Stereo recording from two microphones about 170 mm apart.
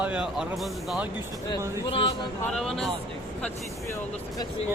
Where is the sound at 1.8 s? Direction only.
30° left (ahead or behind).